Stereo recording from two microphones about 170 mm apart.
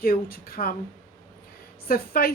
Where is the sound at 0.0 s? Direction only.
60° left (ahead or behind).